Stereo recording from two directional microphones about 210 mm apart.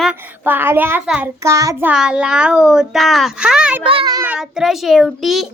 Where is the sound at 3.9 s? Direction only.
20° right (ahead or behind).